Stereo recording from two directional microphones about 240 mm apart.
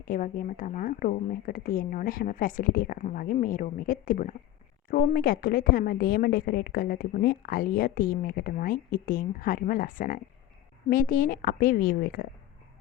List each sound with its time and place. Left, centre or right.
0.1 s a woman's voice: left